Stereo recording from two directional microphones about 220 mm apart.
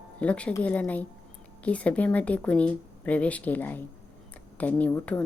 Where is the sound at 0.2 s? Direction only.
5° left (ahead or behind).